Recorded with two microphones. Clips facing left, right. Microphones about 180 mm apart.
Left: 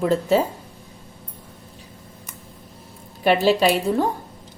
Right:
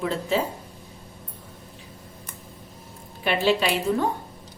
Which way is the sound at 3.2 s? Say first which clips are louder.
Left 5 dB; 40° left (ahead or behind).